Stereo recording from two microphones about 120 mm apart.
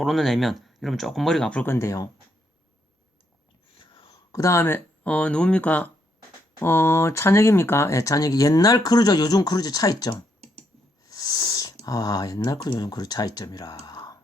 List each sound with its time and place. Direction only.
0.0 s speech: centre (ahead or behind); by 2.0 s 25° left (ahead or behind)
3.8 s a sound: 40° left (ahead or behind)
4.3 s speech: 25° left (ahead or behind)